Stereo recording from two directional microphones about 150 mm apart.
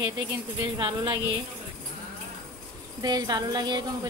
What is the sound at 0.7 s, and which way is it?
Speech, 30° right (ahead or behind).